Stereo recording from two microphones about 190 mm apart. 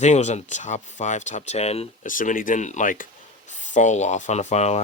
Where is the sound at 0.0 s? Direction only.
35° left (ahead or behind).